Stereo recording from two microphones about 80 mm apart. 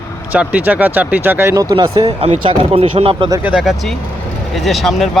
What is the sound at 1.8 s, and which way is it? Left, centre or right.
Speech, right.